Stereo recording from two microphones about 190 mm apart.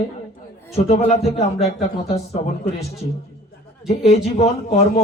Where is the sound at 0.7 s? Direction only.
35° left (ahead or behind).